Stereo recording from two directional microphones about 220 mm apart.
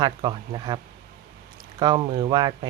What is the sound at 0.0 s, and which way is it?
Speech, 20° right (ahead or behind).